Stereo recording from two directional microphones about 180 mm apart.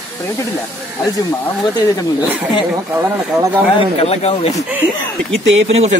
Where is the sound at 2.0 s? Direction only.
20° left (ahead or behind).